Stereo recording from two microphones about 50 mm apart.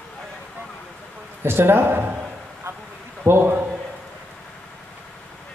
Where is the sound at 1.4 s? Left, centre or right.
Right.